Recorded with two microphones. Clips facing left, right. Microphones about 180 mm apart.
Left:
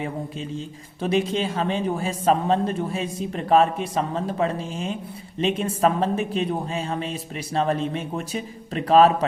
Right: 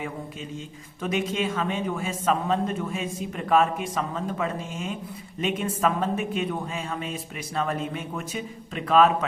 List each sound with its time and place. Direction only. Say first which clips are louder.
0.0 s a man's voice: left 4 dB; 30° left (ahead or behind)